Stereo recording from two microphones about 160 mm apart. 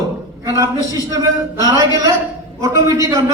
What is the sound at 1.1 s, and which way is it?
A man's voice, 20° right (ahead or behind).